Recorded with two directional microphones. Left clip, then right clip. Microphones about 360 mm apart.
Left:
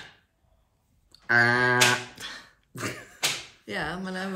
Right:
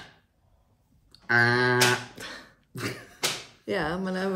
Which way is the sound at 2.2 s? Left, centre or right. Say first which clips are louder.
Left 1 dB; centre.